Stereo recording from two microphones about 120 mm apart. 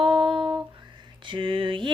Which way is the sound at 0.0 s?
45° right (ahead or behind).